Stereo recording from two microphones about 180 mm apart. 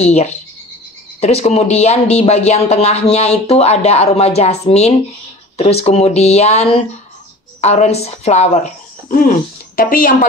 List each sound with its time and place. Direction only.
0.0 s speech: 40° left (ahead or behind)